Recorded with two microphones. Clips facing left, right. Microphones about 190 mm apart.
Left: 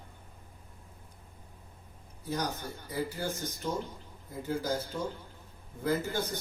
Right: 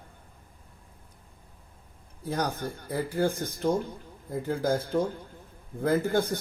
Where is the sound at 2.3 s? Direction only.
55° right (ahead or behind).